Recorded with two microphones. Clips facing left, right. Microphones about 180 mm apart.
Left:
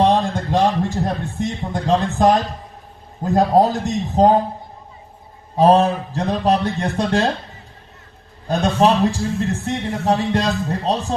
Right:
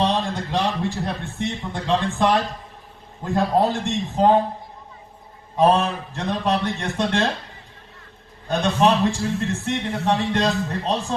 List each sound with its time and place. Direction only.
0.0 s a man's voice: 50° left (ahead or behind)
5.5 s a man's voice: 35° left (ahead or behind)
8.4 s a man's voice: 35° left (ahead or behind)